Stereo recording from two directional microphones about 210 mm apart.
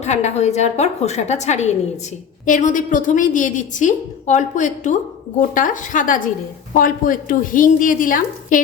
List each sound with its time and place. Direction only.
0.0 s a woman's voice: 35° left (ahead or behind)